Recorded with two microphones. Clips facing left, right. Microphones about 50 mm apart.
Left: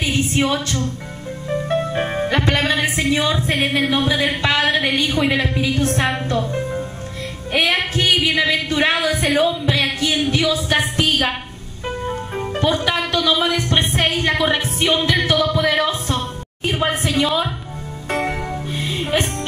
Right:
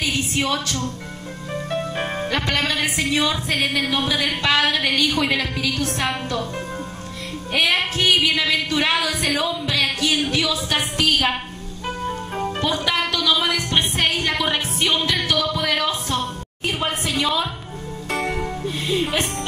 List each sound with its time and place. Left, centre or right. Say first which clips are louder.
0.0 s a sound: left 4 dB; left
1.7 s a woman's voice: left 4 dB; left
12.0 s music: left 1 dB; centre
12.5 s music: left 4 dB; left